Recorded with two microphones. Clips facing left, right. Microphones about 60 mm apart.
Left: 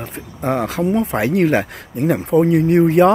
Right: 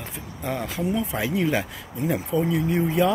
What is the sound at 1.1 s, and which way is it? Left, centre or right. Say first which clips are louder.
Speech: left 8 dB; left.